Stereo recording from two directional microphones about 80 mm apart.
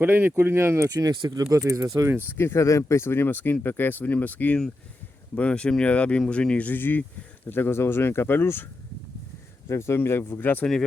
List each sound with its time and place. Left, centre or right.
0.0 s speech: right
0.9 s speech: right
2.4 s speech: left
9.6 s speech: left